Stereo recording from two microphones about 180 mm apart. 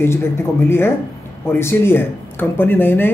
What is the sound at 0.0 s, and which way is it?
Speech, 15° left (ahead or behind).